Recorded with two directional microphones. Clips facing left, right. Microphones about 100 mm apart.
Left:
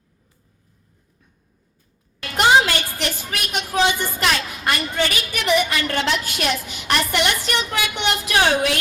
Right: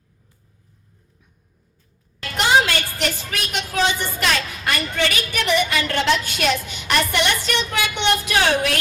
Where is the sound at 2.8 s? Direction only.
15° left (ahead or behind).